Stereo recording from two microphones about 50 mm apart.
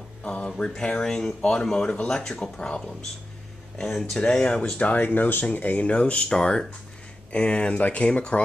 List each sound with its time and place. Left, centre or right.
0.2 s a sound: left
0.5 s speech: centre
4.9 s speech: left